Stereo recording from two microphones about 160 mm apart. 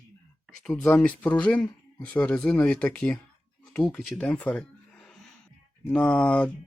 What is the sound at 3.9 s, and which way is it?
Speech, 5° left (ahead or behind).